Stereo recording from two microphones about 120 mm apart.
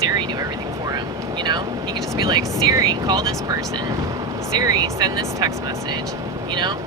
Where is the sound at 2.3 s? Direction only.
30° right (ahead or behind).